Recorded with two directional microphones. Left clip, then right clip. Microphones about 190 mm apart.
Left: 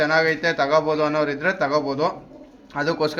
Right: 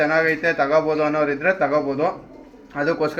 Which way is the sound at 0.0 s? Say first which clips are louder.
Right 1 dB; 25° left (ahead or behind).